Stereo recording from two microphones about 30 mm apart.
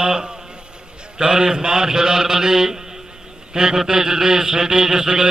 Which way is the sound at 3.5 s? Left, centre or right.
Right.